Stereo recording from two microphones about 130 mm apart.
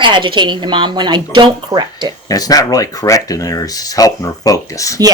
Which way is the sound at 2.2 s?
30° left (ahead or behind).